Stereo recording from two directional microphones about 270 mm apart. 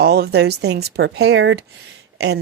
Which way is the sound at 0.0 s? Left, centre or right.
Right.